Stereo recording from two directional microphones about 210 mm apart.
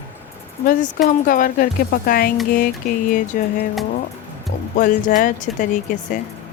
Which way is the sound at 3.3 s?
35° left (ahead or behind).